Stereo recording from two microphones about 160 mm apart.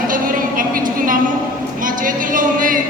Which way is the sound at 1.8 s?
55° right (ahead or behind).